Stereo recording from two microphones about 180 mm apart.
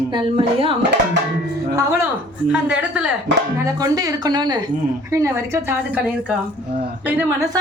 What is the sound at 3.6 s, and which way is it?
A woman's voice, 20° right (ahead or behind).